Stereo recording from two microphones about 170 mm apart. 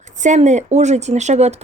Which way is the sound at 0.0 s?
45° right (ahead or behind).